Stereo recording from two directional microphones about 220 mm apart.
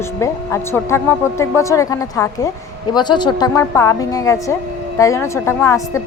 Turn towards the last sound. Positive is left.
turn(degrees=15)  # may be behind; listen again after turning